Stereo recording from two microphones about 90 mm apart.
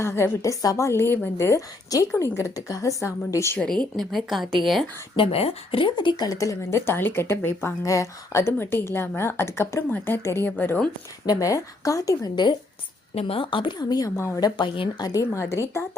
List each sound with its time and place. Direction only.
0.0 s a woman's voice: 30° left (ahead or behind)
3.6 s speech: 10° left (ahead or behind)
5.1 s speech: 90° left; by 6.2 s 60° left (ahead or behind)
6.2 s a woman's voice: 40° left (ahead or behind)
11.3 s a woman's voice: 40° left (ahead or behind)
13.2 s speech: 80° left; by 15.2 s 50° left (ahead or behind)
15.2 s a woman's voice: 30° left (ahead or behind)